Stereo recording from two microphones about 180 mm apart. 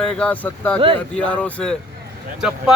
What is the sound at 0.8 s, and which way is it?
Speech, 30° right (ahead or behind).